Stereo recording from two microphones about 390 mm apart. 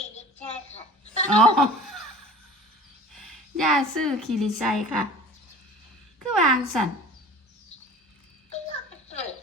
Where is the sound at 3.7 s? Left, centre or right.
Centre.